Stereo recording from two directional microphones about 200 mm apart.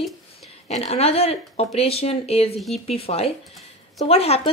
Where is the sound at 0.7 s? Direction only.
30° left (ahead or behind).